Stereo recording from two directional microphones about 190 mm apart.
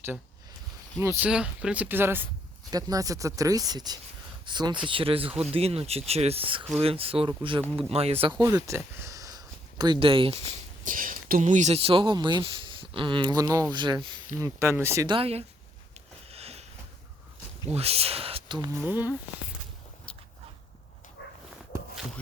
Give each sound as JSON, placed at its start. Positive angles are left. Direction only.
{"t": 0.9, "sound": "speech", "side_deg": -10}
{"t": 8.4, "sound": "speech", "side_deg": -20}
{"t": 15.0, "sound": "speech", "side_deg": -30}
{"t": 16.3, "sound": "a sound", "side_deg": -30}
{"t": 17.7, "sound": "speech", "side_deg": -30}
{"t": 18.9, "sound": "speech", "side_deg": -10}